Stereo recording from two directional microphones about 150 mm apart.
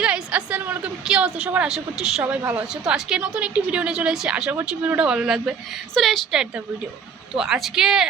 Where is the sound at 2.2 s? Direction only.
15° right (ahead or behind).